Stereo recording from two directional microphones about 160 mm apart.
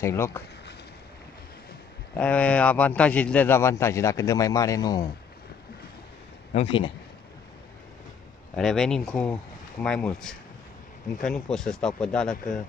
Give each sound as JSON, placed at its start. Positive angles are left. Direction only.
{"t": 0.0, "sound": "a man's voice", "side_deg": 15}
{"t": 2.1, "sound": "a man's voice", "side_deg": 10}
{"t": 6.5, "sound": "speech", "side_deg": 40}
{"t": 8.5, "sound": "speech", "side_deg": 5}